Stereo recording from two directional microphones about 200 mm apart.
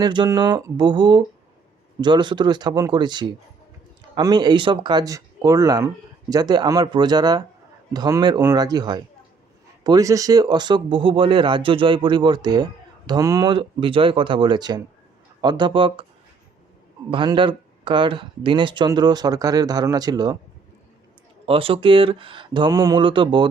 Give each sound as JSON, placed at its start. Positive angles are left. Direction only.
{"t": 0.0, "sound": "speech", "side_deg": -20}
{"t": 17.1, "sound": "speech", "side_deg": -25}
{"t": 21.4, "sound": "speech", "side_deg": -25}